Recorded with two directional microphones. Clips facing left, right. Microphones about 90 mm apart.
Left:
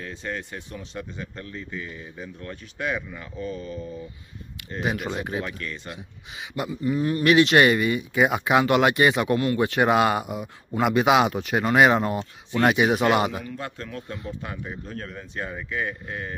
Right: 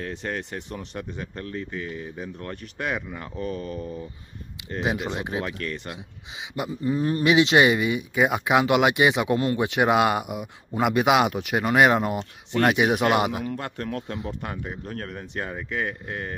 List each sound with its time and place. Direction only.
0.2 s speech: 60° right (ahead or behind)
4.6 s speech: 20° right (ahead or behind)
5.4 s speech: 50° right (ahead or behind)
6.7 s a sound: 30° right (ahead or behind)
7.2 s speech: 15° right (ahead or behind)
9.6 s speech: 10° right (ahead or behind)
13.4 s speech: 60° right (ahead or behind)